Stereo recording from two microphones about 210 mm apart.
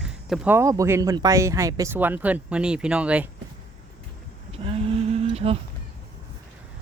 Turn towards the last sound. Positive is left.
turn(degrees=-30)  # may be behind; listen again after turning